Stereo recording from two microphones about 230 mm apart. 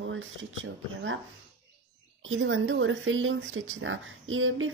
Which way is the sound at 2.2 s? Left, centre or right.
Right.